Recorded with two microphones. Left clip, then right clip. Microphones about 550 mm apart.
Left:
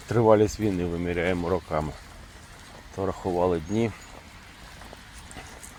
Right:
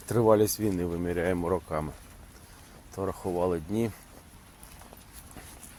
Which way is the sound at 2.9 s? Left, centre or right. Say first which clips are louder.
Left 4 dB; right.